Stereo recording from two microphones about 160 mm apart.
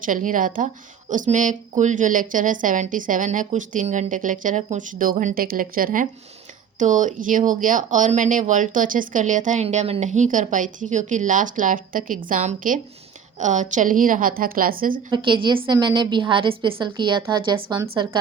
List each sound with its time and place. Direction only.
0.0 s speech: 55° right (ahead or behind)
15.1 s a woman's voice: 30° right (ahead or behind)